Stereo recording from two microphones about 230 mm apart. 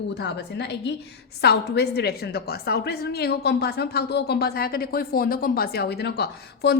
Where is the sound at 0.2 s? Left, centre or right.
Left.